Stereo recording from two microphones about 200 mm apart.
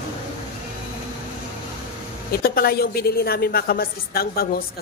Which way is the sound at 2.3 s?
50° left (ahead or behind).